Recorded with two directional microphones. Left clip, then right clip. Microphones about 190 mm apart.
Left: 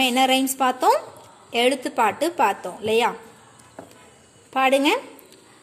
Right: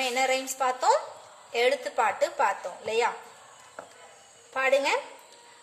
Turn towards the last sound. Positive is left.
turn(degrees=45)  # may be behind; listen again after turning